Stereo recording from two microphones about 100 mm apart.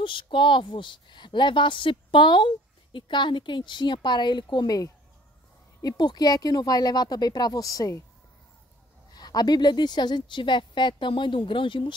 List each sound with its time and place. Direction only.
0.0 s a woman's voice: 55° left (ahead or behind); by 8.0 s 35° left (ahead or behind)
9.1 s a woman's voice: 40° left (ahead or behind)